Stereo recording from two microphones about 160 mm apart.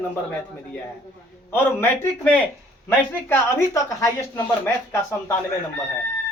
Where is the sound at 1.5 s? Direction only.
15° left (ahead or behind).